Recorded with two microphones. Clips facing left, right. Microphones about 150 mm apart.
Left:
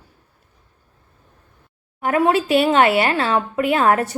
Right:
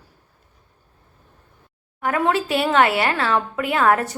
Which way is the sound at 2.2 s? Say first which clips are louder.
Left 5 dB; 20° left (ahead or behind).